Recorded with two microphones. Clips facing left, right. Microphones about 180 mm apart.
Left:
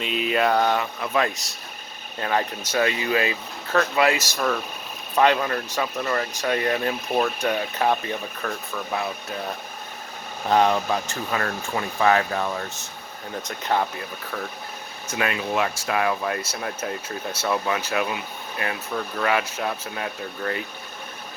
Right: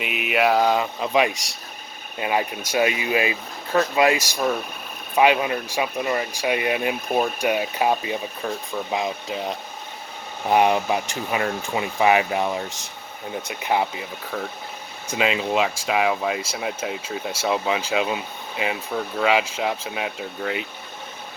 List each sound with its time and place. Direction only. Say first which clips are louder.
0.3 s speech: right 2 dB; 10° right (ahead or behind)
15.4 s speech: right 2 dB; 15° right (ahead or behind)